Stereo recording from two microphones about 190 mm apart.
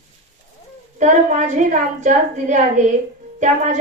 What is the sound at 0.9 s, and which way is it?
A woman's voice, 40° right (ahead or behind).